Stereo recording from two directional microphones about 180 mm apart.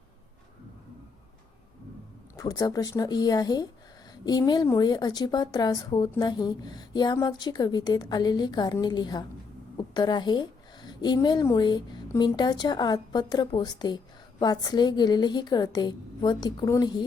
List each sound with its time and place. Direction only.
2.3 s a woman's voice: 20° left (ahead or behind)